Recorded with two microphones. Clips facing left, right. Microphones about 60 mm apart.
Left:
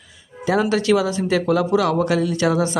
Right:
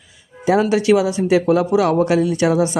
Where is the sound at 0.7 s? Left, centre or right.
Right.